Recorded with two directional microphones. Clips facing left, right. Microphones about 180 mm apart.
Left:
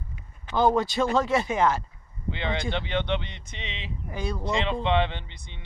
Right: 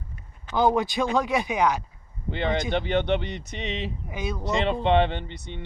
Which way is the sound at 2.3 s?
45° right (ahead or behind).